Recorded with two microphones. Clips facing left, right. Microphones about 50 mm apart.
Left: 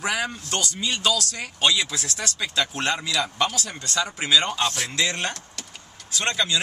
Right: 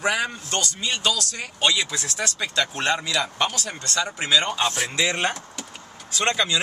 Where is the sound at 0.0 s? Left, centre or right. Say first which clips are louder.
Right 2 dB; centre.